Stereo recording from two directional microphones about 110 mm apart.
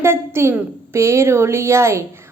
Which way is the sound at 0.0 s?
25° right (ahead or behind).